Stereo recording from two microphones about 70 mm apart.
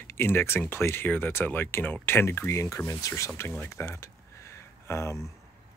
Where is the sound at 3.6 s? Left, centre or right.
Left.